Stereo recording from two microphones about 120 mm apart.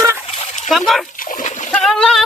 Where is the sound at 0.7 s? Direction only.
Centre (ahead or behind).